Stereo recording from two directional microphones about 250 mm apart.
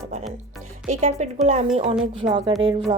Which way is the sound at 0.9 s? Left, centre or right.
Right.